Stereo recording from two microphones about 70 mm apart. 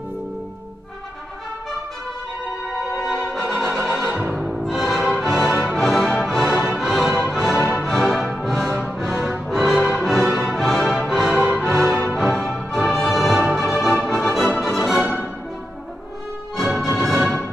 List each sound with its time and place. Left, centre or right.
3.3 s music: centre
4.1 s music: centre
4.5 s music: centre
5.0 s music: centre
16.5 s music: centre